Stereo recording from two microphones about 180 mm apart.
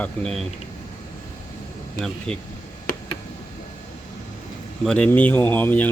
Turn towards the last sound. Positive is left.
turn(degrees=10)  # may be behind; listen again after turning